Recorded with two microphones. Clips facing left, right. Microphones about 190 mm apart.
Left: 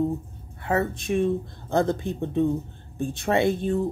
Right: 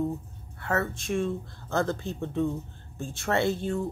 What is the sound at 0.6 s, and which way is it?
Speech, 15° left (ahead or behind).